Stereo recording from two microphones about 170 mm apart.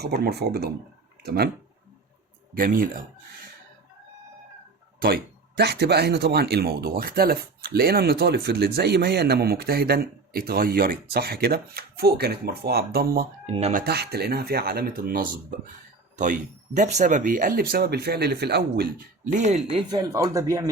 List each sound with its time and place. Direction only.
0.0 s speech: 70° right (ahead or behind)
2.6 s speech: 55° right (ahead or behind)
4.9 s speech: 60° right (ahead or behind)
13.5 s speech: 40° right (ahead or behind)
13.7 s speech: 70° right (ahead or behind)
16.1 s speech: 45° right (ahead or behind)
19.9 s speech: 20° right (ahead or behind)